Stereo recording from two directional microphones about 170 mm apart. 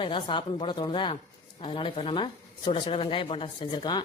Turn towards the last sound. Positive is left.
turn(degrees=25)  # may be behind; listen again after turning